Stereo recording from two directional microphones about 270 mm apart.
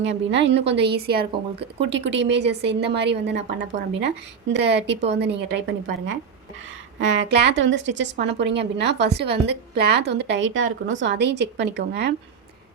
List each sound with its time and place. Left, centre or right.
0.0 s a woman's voice: right